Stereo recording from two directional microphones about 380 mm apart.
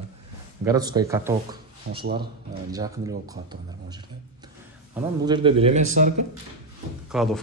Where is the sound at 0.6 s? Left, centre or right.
Centre.